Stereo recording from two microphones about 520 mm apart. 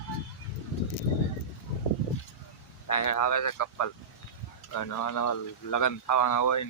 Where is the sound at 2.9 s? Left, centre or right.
Left.